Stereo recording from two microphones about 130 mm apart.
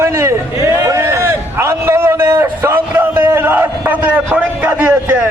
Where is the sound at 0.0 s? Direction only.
20° right (ahead or behind).